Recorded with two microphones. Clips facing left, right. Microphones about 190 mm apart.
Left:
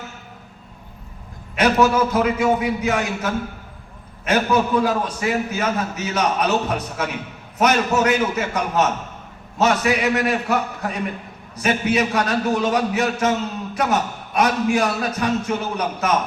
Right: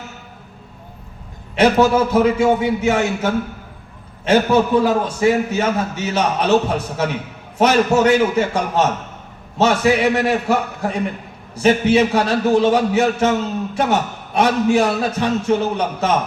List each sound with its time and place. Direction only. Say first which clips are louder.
1.5 s a man's voice: right 3 dB; 30° right (ahead or behind)